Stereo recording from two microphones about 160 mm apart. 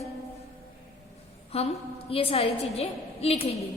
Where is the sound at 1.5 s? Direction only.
40° left (ahead or behind).